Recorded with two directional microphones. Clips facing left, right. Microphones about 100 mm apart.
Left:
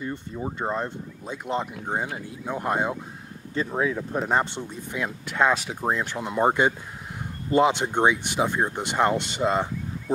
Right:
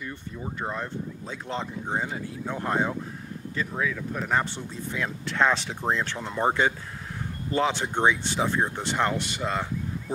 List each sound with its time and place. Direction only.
0.0 s speech: 25° left (ahead or behind)
3.5 s speech: 30° left (ahead or behind)